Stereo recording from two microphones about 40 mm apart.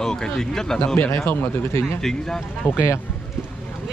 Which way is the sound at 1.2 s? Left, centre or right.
Left.